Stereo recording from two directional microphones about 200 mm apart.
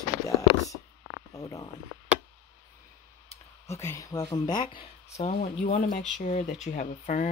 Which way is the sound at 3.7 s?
15° left (ahead or behind).